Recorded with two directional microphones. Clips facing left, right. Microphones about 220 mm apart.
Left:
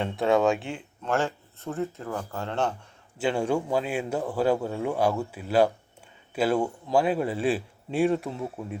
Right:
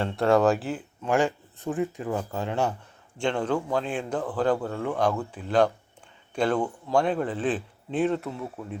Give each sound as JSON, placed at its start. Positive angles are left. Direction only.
{"t": 0.0, "sound": "speech", "side_deg": 0}
{"t": 1.1, "sound": "speech", "side_deg": -15}
{"t": 3.2, "sound": "speech", "side_deg": 10}